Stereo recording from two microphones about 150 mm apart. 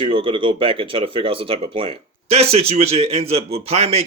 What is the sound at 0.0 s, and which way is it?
Speech, 35° right (ahead or behind).